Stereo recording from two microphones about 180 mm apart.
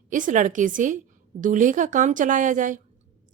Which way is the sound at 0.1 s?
45° right (ahead or behind).